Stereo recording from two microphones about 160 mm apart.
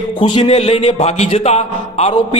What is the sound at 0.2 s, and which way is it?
A man's voice, 35° left (ahead or behind).